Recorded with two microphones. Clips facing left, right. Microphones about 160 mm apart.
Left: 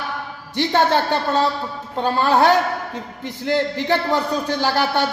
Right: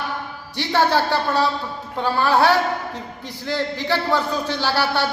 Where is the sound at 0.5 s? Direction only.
20° left (ahead or behind).